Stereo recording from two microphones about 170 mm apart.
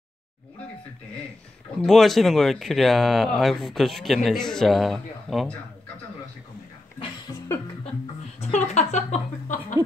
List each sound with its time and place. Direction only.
1.8 s speech: centre (ahead or behind)
8.4 s a woman's voice: 40° left (ahead or behind)